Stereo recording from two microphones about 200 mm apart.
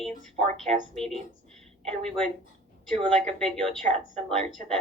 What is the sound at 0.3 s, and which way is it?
Speech, 5° left (ahead or behind).